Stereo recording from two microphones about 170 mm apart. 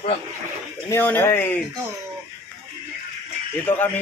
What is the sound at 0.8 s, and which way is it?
Speech, 10° left (ahead or behind).